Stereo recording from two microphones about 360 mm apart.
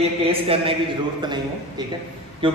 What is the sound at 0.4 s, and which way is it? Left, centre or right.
A man's voice, centre.